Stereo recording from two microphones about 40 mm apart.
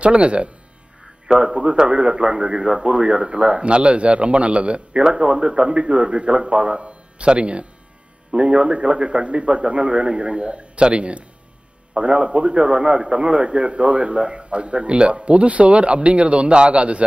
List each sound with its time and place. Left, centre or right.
0.0 s speech: right